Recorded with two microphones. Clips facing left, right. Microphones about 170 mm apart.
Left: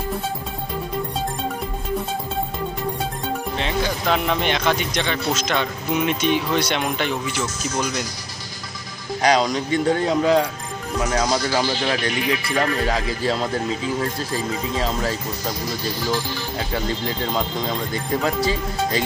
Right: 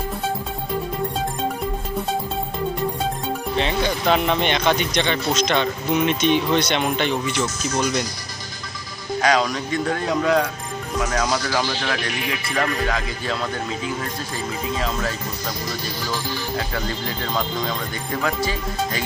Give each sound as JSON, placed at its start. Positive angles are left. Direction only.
{"t": 3.5, "sound": "speech", "side_deg": 0}
{"t": 9.2, "sound": "speech", "side_deg": 25}
{"t": 11.2, "sound": "speech", "side_deg": 15}
{"t": 12.5, "sound": "speech", "side_deg": 30}
{"t": 14.8, "sound": "speech", "side_deg": 30}